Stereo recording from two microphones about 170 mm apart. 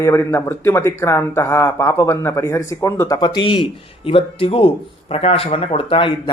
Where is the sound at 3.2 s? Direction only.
30° left (ahead or behind).